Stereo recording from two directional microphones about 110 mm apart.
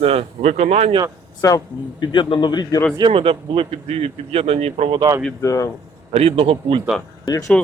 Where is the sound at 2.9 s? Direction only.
50° right (ahead or behind); by 5.0 s 70° right (ahead or behind).